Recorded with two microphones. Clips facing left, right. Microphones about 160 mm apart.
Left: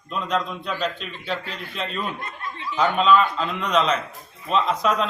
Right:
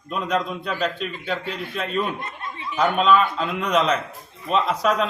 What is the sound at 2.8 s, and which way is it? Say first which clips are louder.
A man's voice: even; 10° right (ahead or behind).